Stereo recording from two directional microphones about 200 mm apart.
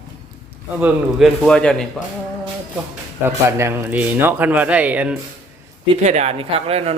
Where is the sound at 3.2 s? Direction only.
10° right (ahead or behind).